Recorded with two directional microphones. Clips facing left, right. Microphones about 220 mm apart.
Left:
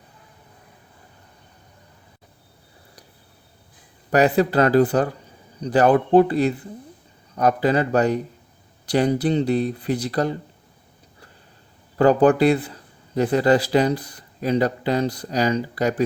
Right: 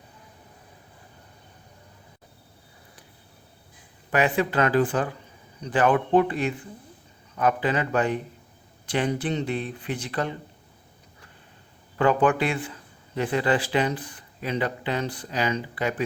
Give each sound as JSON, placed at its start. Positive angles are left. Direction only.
{"t": 4.1, "sound": "speech", "side_deg": 40}
{"t": 11.9, "sound": "speech", "side_deg": 35}